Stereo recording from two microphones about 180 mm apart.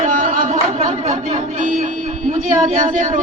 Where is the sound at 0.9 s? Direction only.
40° right (ahead or behind).